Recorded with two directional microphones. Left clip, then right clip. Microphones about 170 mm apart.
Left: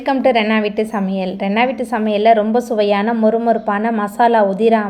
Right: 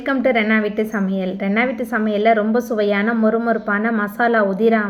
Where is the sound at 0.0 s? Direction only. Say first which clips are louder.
Left 3 dB; 15° left (ahead or behind).